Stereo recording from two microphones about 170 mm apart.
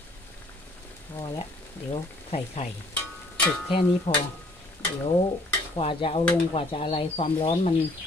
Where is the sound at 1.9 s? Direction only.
40° left (ahead or behind).